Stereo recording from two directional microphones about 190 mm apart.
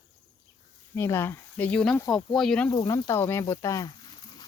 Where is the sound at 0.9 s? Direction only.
15° left (ahead or behind).